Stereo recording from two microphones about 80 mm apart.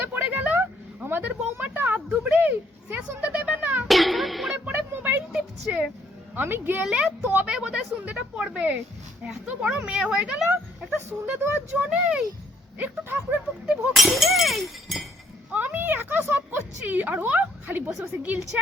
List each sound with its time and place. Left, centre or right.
0.0 s a sound: right
3.8 s cat: centre
4.5 s a sound: right
5.3 s a sound: centre
6.3 s speech: right
7.4 s speech: centre
10.9 s speech: right
12.8 s speech: right
13.7 s speech: centre
15.5 s speech: right